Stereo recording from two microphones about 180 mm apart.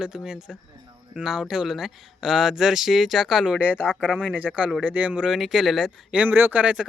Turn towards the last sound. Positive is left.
turn(degrees=-5)  # may be behind; listen again after turning